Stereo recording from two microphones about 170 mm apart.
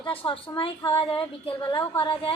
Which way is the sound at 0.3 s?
30° left (ahead or behind).